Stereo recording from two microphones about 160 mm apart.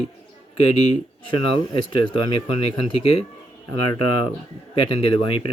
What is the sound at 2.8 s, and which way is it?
Speech, 40° left (ahead or behind).